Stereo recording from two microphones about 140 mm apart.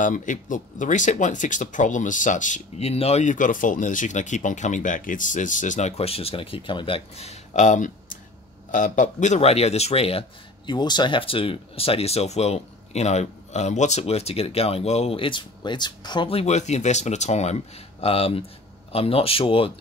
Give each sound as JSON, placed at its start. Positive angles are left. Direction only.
{"t": 0.0, "sound": "speech", "side_deg": 65}
{"t": 10.7, "sound": "speech", "side_deg": 30}